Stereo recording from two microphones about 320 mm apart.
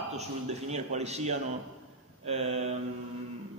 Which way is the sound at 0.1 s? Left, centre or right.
Right.